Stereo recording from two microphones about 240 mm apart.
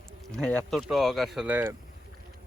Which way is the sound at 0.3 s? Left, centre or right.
Centre.